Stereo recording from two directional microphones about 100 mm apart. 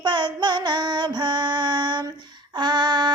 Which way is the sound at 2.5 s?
50° right (ahead or behind).